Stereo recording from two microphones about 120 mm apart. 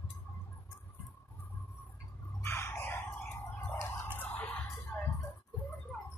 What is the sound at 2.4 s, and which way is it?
Dog, 20° left (ahead or behind).